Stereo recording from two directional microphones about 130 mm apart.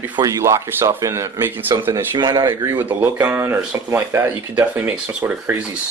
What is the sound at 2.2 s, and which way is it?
Speech, 30° right (ahead or behind).